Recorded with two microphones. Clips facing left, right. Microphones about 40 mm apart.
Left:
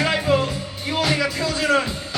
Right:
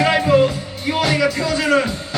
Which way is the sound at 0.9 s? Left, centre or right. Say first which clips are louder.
Right 4 dB; right.